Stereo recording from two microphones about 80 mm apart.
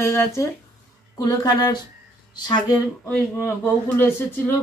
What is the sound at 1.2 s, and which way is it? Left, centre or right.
Speech, left.